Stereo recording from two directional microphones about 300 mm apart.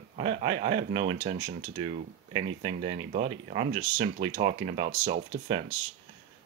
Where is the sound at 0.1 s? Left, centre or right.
Right.